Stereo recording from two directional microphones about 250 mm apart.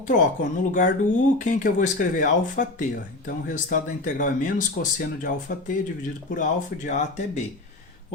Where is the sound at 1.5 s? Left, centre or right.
Left.